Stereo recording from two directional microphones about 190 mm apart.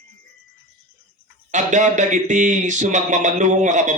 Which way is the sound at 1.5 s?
40° right (ahead or behind).